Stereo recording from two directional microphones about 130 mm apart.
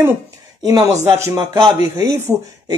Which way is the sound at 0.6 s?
30° right (ahead or behind).